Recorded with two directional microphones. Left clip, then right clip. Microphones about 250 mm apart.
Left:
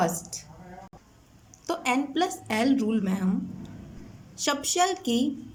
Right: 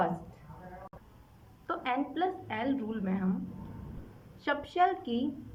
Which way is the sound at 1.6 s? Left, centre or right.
Left.